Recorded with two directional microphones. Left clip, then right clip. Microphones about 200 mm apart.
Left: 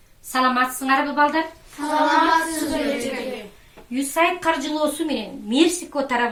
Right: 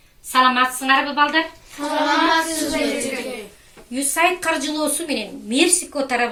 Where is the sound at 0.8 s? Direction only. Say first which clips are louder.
Even; 20° left (ahead or behind).